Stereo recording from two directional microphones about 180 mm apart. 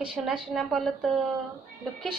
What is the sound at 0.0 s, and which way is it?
A woman's voice, 5° right (ahead or behind).